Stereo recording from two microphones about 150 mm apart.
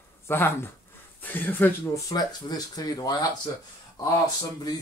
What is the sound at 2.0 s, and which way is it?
Speech, 25° left (ahead or behind).